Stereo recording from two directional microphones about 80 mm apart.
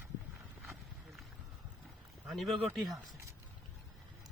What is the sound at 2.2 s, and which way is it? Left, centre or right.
Speech, centre.